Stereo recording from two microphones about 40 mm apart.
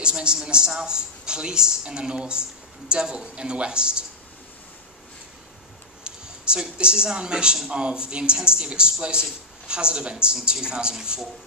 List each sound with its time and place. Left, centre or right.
0.0 s speech: right
6.0 s speech: right